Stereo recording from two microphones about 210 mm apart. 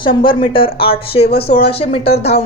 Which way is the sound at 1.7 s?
30° left (ahead or behind).